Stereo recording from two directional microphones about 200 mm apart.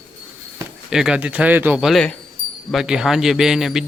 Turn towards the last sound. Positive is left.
turn(degrees=0)  # may be behind; listen again after turning